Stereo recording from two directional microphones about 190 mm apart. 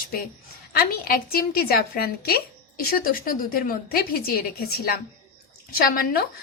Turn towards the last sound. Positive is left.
turn(degrees=50)  # may be behind; listen again after turning